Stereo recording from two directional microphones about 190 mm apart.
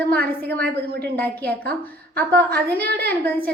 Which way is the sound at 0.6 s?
55° right (ahead or behind).